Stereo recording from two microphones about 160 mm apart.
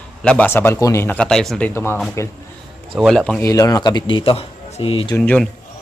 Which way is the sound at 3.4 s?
20° left (ahead or behind).